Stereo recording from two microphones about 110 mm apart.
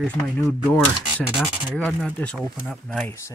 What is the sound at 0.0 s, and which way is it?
Speech, 10° left (ahead or behind).